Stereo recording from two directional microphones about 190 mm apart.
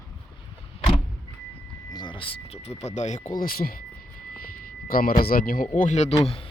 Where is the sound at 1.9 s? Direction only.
20° left (ahead or behind); by 3.2 s 40° left (ahead or behind).